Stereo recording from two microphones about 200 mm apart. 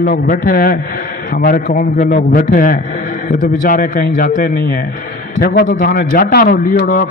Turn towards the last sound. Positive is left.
turn(degrees=45)  # may be behind; listen again after turning